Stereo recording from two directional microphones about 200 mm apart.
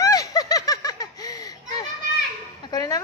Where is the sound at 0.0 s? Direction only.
15° left (ahead or behind).